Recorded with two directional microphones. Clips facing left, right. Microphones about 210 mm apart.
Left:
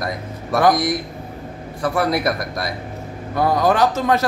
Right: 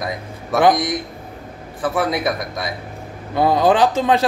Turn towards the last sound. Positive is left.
turn(degrees=-30)  # may be behind; listen again after turning